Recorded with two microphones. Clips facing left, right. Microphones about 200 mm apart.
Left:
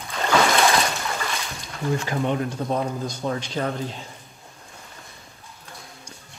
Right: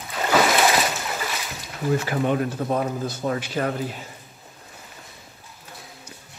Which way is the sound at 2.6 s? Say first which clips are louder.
Right 1 dB; 55° right (ahead or behind).